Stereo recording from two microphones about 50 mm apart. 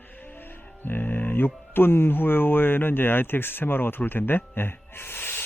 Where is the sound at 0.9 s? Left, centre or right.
Left.